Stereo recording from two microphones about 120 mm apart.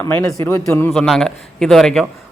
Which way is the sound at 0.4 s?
20° left (ahead or behind).